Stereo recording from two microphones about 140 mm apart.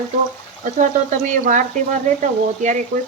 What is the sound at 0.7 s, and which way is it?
Speech, 60° right (ahead or behind).